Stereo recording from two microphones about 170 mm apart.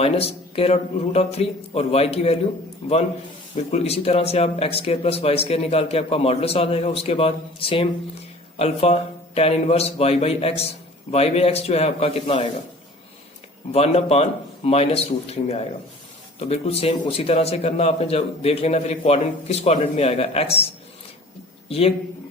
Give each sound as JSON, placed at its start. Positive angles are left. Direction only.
{"t": 0.0, "sound": "speech", "side_deg": 35}
{"t": 13.7, "sound": "speech", "side_deg": 35}
{"t": 21.7, "sound": "speech", "side_deg": 35}